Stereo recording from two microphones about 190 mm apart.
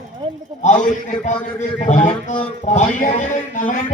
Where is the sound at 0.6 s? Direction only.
40° left (ahead or behind).